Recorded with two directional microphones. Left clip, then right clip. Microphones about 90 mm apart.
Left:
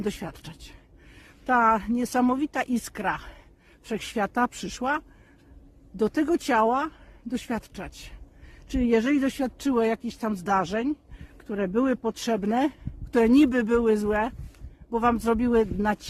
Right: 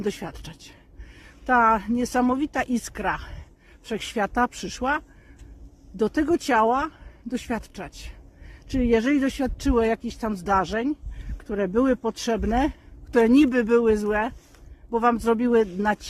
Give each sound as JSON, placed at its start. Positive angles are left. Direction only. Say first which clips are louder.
{"t": 0.0, "sound": "speech", "louder": "right 3 dB", "side_deg": 25}